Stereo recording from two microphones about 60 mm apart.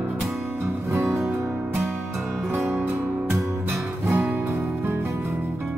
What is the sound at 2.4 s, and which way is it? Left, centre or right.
Music, right.